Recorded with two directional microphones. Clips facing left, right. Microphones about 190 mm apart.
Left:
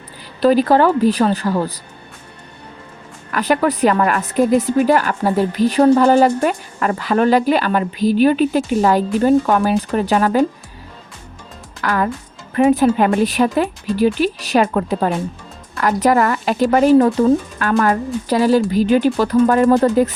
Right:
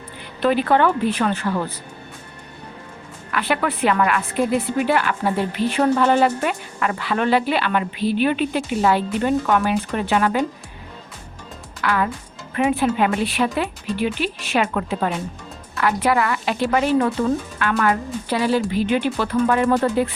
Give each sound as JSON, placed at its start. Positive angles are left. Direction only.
{"t": 0.3, "sound": "a woman's voice", "side_deg": 35}
{"t": 3.3, "sound": "a woman's voice", "side_deg": 40}
{"t": 11.8, "sound": "a woman's voice", "side_deg": 40}